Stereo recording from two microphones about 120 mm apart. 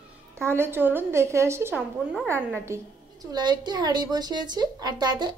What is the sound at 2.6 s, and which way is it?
A woman's voice, 25° right (ahead or behind).